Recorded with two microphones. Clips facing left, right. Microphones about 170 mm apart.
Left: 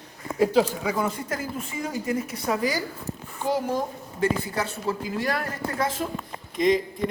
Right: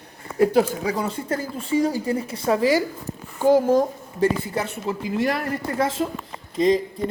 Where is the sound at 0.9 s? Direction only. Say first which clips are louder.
Right 2 dB; 30° right (ahead or behind).